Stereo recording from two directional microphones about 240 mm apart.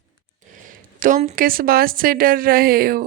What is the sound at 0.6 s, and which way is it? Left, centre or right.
Speech, right.